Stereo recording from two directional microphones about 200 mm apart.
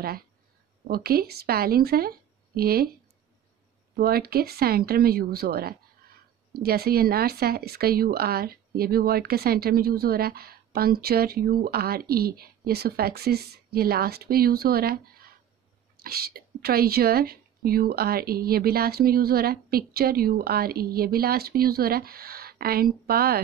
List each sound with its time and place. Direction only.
0.8 s speech: 50° right (ahead or behind)
3.9 s speech: 50° right (ahead or behind)